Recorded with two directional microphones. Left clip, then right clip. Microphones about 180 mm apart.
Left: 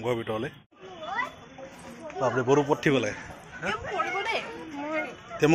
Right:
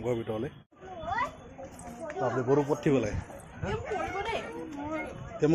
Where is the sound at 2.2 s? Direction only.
35° left (ahead or behind).